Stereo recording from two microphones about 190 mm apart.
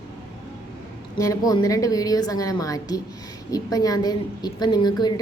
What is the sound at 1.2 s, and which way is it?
A woman's voice, 20° left (ahead or behind).